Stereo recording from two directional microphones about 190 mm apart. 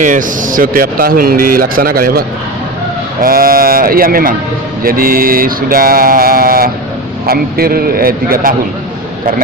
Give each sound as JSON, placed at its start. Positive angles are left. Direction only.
{"t": 0.0, "sound": "speech", "side_deg": -45}